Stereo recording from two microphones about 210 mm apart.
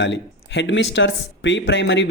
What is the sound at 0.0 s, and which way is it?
Speech, 60° left (ahead or behind).